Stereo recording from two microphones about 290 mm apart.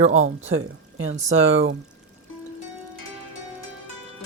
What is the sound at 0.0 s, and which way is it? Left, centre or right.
Speech, right.